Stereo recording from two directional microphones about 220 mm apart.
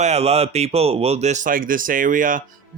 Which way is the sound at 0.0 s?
30° right (ahead or behind).